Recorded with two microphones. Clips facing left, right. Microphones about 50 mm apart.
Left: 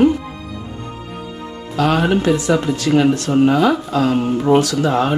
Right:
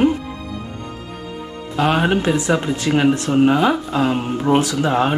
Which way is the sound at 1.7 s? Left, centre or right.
Right.